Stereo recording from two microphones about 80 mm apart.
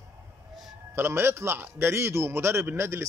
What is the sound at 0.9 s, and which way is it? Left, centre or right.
A man's voice, right.